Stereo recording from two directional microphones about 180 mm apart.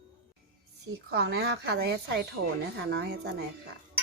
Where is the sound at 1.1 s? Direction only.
65° right (ahead or behind).